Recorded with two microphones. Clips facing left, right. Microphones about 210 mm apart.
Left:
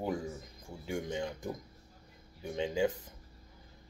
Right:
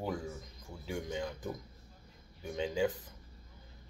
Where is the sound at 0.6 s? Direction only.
25° left (ahead or behind).